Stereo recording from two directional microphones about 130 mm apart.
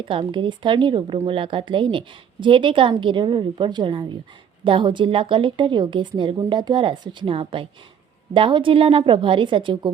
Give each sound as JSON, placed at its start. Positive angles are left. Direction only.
{"t": 0.0, "sound": "a woman's voice", "side_deg": -40}